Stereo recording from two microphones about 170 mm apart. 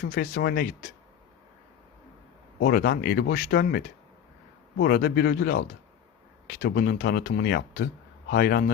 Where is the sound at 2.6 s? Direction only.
65° left (ahead or behind).